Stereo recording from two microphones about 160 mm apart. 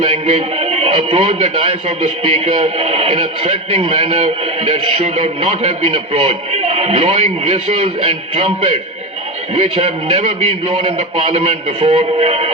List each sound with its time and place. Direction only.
0.0 s a man's voice: 40° right (ahead or behind)
9.6 s a man's voice: 40° right (ahead or behind)